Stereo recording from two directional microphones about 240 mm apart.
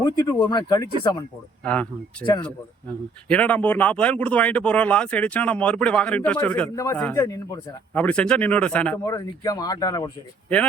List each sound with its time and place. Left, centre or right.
0.0 s speech: centre
1.6 s speech: centre
3.2 s speech: centre